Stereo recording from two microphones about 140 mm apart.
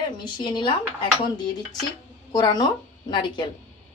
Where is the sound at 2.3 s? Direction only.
30° left (ahead or behind).